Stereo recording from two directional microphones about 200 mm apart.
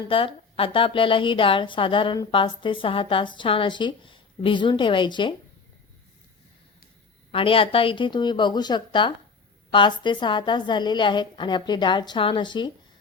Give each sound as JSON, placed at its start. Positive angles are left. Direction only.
{"t": 0.1, "sound": "a woman's voice", "side_deg": 25}
{"t": 7.3, "sound": "a woman's voice", "side_deg": 25}